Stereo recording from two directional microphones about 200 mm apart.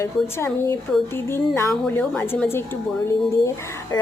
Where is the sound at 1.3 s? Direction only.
15° left (ahead or behind).